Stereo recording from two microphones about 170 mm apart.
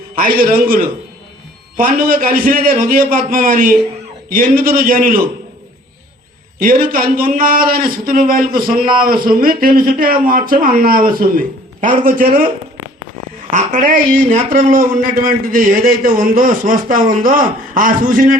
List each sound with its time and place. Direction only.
0.2 s a man's voice: 55° right (ahead or behind)
6.6 s a man's voice: 55° right (ahead or behind)
13.5 s a man's voice: 50° right (ahead or behind)